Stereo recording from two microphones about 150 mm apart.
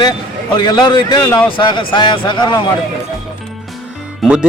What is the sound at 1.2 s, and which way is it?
Speech, 15° left (ahead or behind).